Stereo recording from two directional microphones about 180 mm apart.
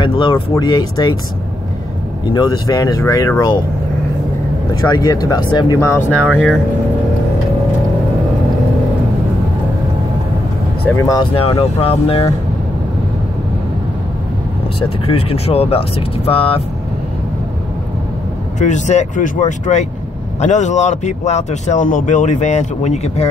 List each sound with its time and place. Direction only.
0.0 s speech: 25° left (ahead or behind)
2.3 s speech: 20° left (ahead or behind)
4.8 s speech: 20° left (ahead or behind)
10.9 s speech: 20° left (ahead or behind)
11.8 s speech: 30° left (ahead or behind)
15.0 s speech: 30° left (ahead or behind)
18.6 s speech: 40° left (ahead or behind)